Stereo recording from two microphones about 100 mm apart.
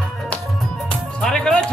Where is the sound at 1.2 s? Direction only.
5° left (ahead or behind).